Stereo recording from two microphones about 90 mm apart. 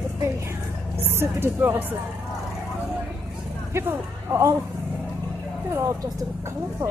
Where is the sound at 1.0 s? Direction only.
25° right (ahead or behind).